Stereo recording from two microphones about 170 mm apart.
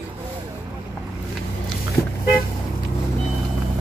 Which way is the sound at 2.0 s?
15° left (ahead or behind).